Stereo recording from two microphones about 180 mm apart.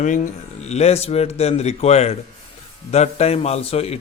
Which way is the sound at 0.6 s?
35° left (ahead or behind).